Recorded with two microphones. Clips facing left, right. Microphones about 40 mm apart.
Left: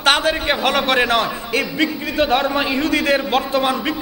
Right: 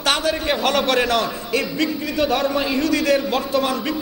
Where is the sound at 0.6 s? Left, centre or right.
Centre.